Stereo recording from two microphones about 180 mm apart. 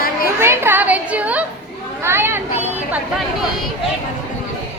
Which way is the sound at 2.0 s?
15° right (ahead or behind).